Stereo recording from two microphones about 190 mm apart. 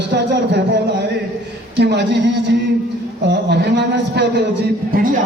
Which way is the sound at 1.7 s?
65° right (ahead or behind).